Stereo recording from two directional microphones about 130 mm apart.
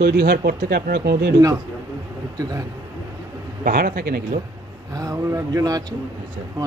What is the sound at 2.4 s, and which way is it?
Speech, 30° right (ahead or behind).